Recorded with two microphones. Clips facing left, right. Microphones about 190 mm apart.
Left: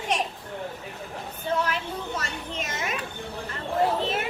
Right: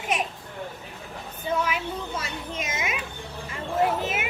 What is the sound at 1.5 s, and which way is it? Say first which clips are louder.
A woman's voice: right 1 dB; 10° right (ahead or behind).